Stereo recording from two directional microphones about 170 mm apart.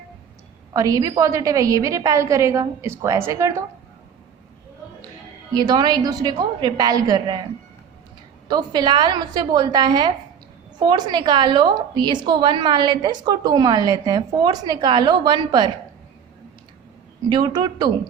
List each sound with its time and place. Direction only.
0.7 s a woman's voice: 20° right (ahead or behind)
5.5 s a woman's voice: 25° right (ahead or behind)
8.4 s a woman's voice: 25° right (ahead or behind)
17.2 s a woman's voice: 25° right (ahead or behind)